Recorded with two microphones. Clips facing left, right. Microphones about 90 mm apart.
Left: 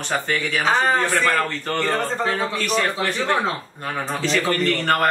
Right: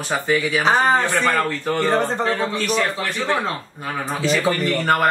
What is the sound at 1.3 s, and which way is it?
A man's voice, 5° right (ahead or behind).